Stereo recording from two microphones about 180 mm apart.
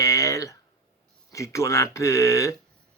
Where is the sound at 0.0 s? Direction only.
20° left (ahead or behind).